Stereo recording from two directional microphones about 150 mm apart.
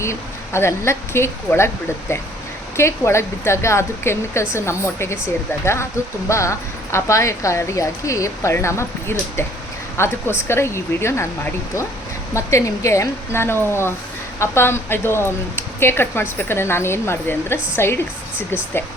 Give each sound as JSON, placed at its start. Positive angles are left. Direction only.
{"t": 0.0, "sound": "speech", "side_deg": 15}